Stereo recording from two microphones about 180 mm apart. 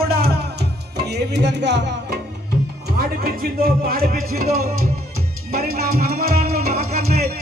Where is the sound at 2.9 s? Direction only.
55° right (ahead or behind).